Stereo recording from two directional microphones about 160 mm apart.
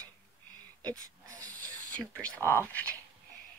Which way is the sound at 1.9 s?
10° left (ahead or behind).